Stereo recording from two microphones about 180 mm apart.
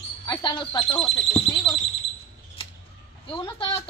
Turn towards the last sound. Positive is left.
turn(degrees=30)  # may be behind; listen again after turning